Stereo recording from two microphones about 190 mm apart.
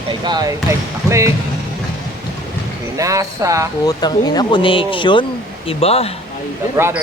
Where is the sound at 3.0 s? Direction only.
15° right (ahead or behind).